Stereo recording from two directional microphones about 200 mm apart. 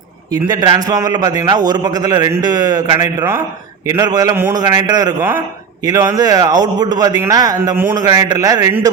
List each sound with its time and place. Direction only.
0.4 s a man's voice: 20° right (ahead or behind)